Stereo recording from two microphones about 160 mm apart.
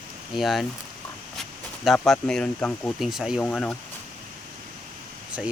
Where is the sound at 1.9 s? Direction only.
Centre (ahead or behind).